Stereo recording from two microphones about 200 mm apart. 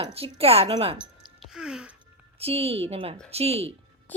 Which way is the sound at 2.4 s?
30° right (ahead or behind).